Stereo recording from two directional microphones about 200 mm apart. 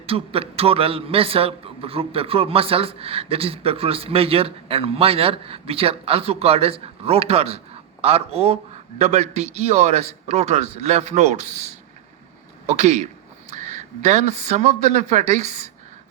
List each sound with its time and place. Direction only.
0.0 s a man's voice: 30° right (ahead or behind)